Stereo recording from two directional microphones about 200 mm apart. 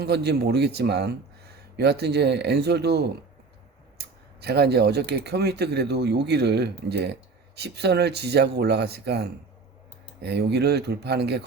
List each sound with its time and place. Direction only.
0.0 s speech: 55° right (ahead or behind)